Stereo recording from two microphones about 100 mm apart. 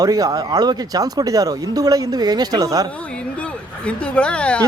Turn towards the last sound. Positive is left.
turn(degrees=10)  # may be behind; listen again after turning